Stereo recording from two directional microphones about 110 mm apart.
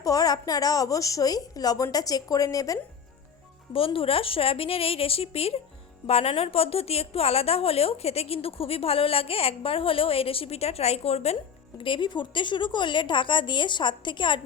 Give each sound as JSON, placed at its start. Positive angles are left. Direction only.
{"t": 0.0, "sound": "a woman's voice", "side_deg": 35}
{"t": 3.7, "sound": "a woman's voice", "side_deg": 55}
{"t": 11.8, "sound": "a woman's voice", "side_deg": 50}